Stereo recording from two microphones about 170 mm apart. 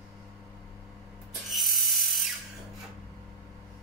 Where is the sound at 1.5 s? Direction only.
Centre (ahead or behind).